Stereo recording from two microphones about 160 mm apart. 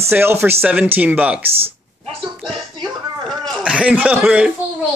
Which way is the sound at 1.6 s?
35° right (ahead or behind).